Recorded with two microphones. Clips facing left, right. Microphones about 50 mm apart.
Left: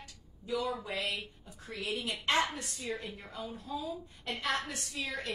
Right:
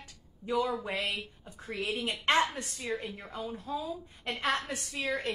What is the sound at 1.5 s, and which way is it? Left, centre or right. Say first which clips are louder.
A woman's voice: right 3 dB; right.